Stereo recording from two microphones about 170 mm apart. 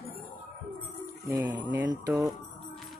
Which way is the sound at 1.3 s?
15° right (ahead or behind).